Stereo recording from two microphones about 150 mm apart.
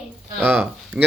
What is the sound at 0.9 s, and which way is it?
Speech, 5° right (ahead or behind).